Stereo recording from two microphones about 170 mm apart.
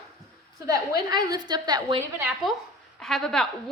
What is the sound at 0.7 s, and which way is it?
A woman's voice, 25° right (ahead or behind).